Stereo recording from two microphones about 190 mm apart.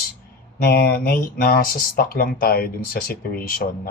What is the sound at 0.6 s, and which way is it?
A man's voice, 55° left (ahead or behind).